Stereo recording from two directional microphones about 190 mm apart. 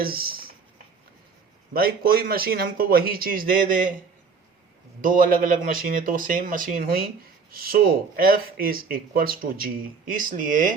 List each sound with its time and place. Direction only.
0.0 s speech: 50° right (ahead or behind)
1.7 s speech: 50° right (ahead or behind)
4.9 s speech: 45° right (ahead or behind)